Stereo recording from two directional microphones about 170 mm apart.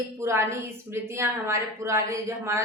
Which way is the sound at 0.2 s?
15° right (ahead or behind).